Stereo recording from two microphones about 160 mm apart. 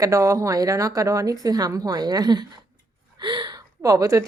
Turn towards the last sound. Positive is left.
turn(degrees=-20)  # may be behind; listen again after turning